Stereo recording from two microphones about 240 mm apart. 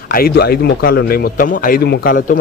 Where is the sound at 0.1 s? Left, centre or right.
Left.